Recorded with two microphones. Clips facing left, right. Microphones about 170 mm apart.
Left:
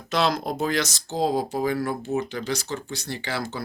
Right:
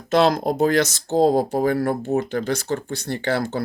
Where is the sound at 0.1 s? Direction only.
50° right (ahead or behind).